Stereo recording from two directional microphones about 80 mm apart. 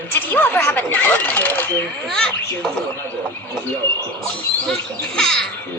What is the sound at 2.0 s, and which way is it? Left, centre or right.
Speech, centre.